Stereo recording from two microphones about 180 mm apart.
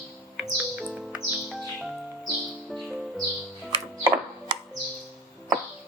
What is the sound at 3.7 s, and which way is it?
Music, 30° right (ahead or behind).